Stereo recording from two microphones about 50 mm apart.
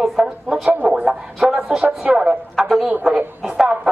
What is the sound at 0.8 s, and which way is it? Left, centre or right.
Speech, right.